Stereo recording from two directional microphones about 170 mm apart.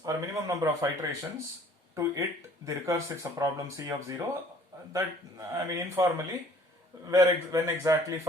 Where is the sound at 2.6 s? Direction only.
20° right (ahead or behind).